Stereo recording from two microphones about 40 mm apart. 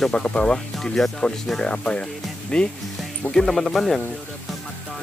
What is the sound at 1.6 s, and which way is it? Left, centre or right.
Speech, left.